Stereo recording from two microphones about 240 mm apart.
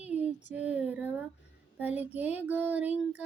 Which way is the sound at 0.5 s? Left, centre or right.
Centre.